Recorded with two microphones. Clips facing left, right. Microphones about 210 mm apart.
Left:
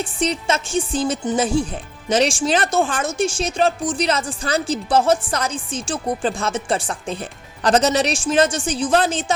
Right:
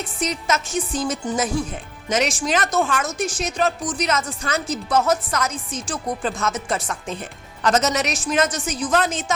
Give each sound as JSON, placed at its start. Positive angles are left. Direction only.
{"t": 0.0, "sound": "music", "side_deg": 30}
{"t": 2.0, "sound": "speech", "side_deg": 30}